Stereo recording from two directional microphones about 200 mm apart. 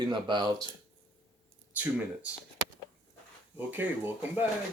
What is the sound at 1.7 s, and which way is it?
Speech, 10° right (ahead or behind).